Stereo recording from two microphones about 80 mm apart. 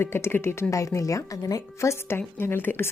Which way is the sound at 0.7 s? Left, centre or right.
Left.